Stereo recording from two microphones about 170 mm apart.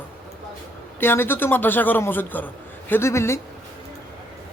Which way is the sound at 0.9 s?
15° left (ahead or behind).